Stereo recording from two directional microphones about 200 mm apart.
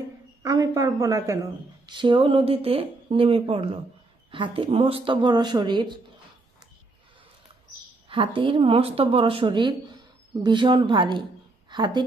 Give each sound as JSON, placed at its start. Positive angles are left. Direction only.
{"t": 0.4, "sound": "a woman's voice", "side_deg": -20}
{"t": 8.1, "sound": "a woman's voice", "side_deg": -25}